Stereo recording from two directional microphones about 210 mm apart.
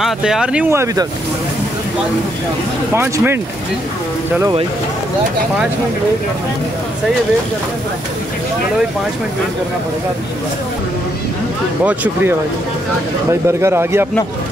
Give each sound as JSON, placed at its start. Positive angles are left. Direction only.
{"t": 0.0, "sound": "speech", "side_deg": -5}
{"t": 2.9, "sound": "speech", "side_deg": -10}
{"t": 4.4, "sound": "speech", "side_deg": -20}
{"t": 11.8, "sound": "speech", "side_deg": -5}